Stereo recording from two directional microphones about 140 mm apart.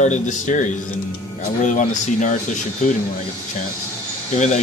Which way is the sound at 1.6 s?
65° left (ahead or behind).